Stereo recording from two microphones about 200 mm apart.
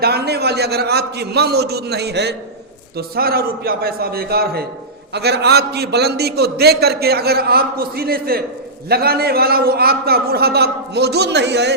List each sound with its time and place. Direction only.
0.0 s a man's voice: 55° right (ahead or behind)